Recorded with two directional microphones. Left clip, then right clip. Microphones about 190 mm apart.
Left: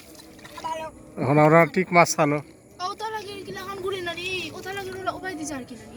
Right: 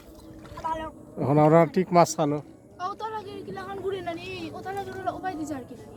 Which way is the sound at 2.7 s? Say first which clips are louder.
Left 2 dB; 45° left (ahead or behind).